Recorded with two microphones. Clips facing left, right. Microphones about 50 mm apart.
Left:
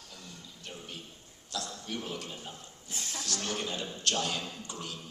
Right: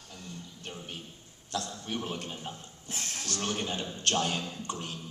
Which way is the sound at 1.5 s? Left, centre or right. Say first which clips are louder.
Right 3 dB; right.